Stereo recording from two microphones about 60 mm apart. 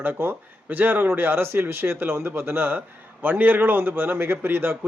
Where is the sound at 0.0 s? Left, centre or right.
Right.